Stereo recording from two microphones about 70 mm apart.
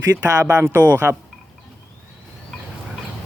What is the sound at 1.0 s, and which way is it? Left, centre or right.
Speech, right.